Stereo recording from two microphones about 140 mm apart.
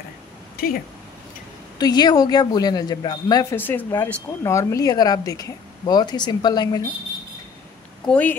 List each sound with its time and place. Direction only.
0.6 s speech: 90° left
1.8 s a woman's voice: 30° left (ahead or behind)
3.5 s a woman's voice: 15° left (ahead or behind); by 6.8 s 30° left (ahead or behind)
8.1 s speech: 10° left (ahead or behind)